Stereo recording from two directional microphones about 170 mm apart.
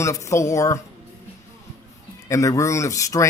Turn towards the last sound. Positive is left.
turn(degrees=20)  # may be behind; listen again after turning